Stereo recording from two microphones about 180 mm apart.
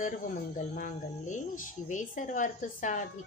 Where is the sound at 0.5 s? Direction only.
45° left (ahead or behind).